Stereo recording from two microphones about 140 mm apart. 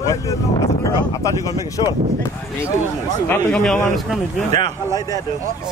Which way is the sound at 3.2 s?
15° left (ahead or behind).